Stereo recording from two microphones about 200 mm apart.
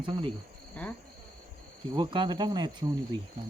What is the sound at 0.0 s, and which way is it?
Speech, 25° right (ahead or behind).